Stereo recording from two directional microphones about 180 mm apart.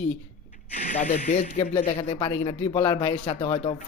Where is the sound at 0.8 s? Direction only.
40° left (ahead or behind).